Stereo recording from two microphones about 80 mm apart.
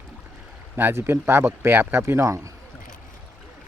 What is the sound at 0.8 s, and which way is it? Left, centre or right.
Speech, right.